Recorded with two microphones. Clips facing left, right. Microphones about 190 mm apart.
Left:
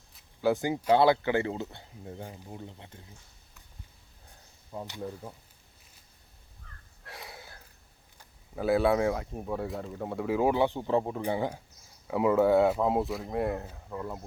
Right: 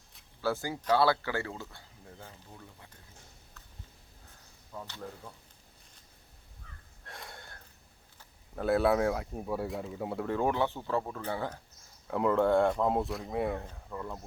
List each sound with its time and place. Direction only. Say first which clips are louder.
0.4 s speech: left 5 dB; 20° left (ahead or behind)
4.9 s speech: left 6 dB; 20° left (ahead or behind)
7.1 s a sound: left 2 dB; centre (ahead or behind)
8.2 s speech: left 2 dB; 5° left (ahead or behind)
10.2 s speech: left 5 dB; 10° left (ahead or behind)